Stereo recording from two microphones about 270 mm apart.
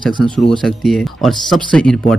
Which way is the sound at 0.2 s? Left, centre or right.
Centre.